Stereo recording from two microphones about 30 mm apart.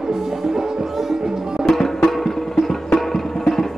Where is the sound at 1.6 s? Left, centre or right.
Centre.